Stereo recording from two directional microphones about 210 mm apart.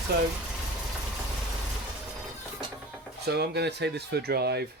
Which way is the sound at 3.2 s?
50° right (ahead or behind).